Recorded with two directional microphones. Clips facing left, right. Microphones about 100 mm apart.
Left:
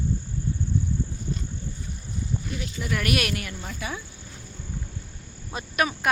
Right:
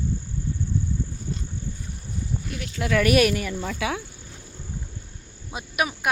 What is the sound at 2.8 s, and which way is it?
Cricket, 90° right.